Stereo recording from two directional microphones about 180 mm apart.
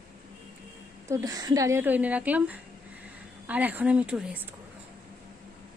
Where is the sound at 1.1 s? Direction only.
20° right (ahead or behind).